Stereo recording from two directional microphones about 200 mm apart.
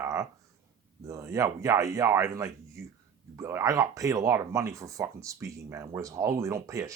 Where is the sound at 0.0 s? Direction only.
15° right (ahead or behind).